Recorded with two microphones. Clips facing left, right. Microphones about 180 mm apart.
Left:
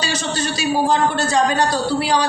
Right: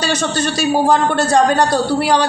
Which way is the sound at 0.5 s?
50° right (ahead or behind).